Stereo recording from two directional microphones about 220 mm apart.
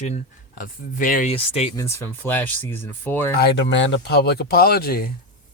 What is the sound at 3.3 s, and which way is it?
Speech, 50° left (ahead or behind).